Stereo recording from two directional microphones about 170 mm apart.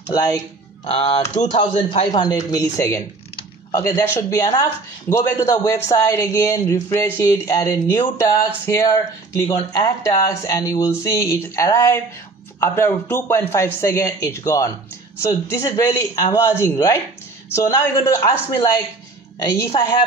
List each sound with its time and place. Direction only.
0.1 s speech: 20° left (ahead or behind)
0.8 s speech: 35° left (ahead or behind); by 18.3 s 15° left (ahead or behind)
19.3 s speech: 20° left (ahead or behind)